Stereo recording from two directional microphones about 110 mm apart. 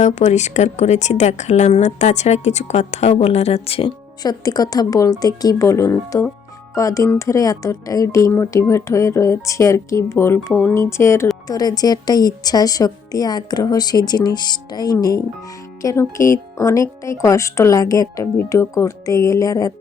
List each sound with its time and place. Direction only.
0.0 s a woman's voice: 90° left; by 3.9 s 60° left (ahead or behind)
4.2 s a woman's voice: 35° left (ahead or behind)
11.4 s a woman's voice: 35° left (ahead or behind)